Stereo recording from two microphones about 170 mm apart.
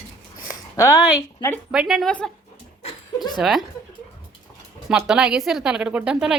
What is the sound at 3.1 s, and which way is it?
Speech, 25° left (ahead or behind).